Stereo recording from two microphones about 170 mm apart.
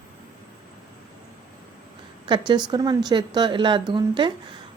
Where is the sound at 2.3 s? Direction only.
25° right (ahead or behind).